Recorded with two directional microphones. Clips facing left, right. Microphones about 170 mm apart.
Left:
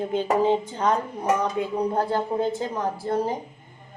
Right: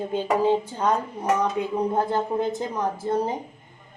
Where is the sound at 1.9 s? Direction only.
20° right (ahead or behind).